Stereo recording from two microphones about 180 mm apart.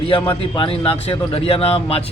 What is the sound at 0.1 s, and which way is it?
Speech, 25° left (ahead or behind).